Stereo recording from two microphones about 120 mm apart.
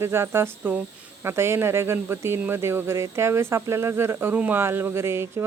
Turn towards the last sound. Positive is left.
turn(degrees=-20)  # may be behind; listen again after turning